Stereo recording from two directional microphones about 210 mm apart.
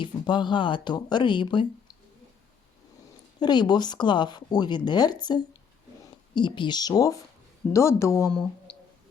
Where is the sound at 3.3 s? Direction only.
20° left (ahead or behind).